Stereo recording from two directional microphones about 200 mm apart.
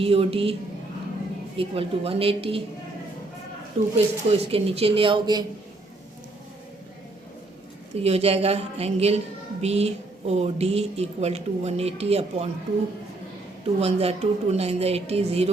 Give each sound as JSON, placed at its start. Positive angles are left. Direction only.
{"t": 0.0, "sound": "speech", "side_deg": -30}
{"t": 1.5, "sound": "speech", "side_deg": -30}
{"t": 3.9, "sound": "speech", "side_deg": -30}
{"t": 7.9, "sound": "a woman's voice", "side_deg": -30}
{"t": 13.7, "sound": "a woman's voice", "side_deg": -30}